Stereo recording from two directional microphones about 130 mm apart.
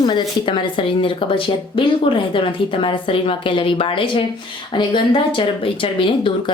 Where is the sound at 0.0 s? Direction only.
35° left (ahead or behind).